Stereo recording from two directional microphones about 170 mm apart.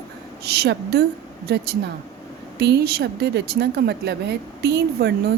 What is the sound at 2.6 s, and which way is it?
A woman's voice, 75° right (ahead or behind).